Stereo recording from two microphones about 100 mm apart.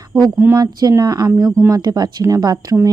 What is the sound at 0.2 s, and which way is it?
Speech, 35° right (ahead or behind).